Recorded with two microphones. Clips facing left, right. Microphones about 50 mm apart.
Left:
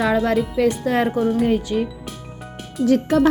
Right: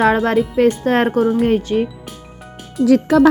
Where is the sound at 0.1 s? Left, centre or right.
Right.